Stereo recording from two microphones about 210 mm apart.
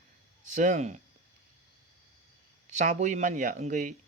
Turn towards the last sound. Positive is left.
turn(degrees=-35)  # may be behind; listen again after turning